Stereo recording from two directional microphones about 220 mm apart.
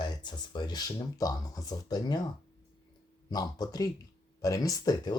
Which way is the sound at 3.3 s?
15° left (ahead or behind).